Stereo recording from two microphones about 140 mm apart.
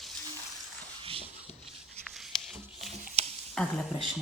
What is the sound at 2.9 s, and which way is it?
Stir, 65° right (ahead or behind).